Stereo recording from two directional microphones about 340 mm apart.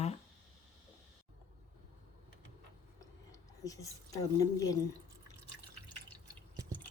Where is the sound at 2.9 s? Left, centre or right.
Centre.